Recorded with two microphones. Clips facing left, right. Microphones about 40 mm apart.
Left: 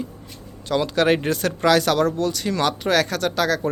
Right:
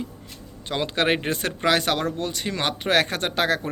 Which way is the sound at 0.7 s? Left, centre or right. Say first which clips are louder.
Left 4 dB; right.